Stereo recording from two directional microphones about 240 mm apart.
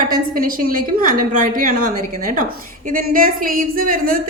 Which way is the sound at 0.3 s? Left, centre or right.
Right.